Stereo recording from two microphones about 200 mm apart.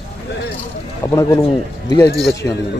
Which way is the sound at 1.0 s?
15° left (ahead or behind).